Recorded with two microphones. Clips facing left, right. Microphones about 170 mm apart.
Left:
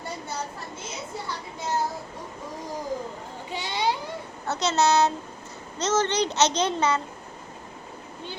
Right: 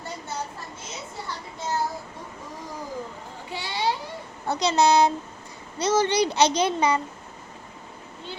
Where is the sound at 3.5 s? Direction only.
20° left (ahead or behind).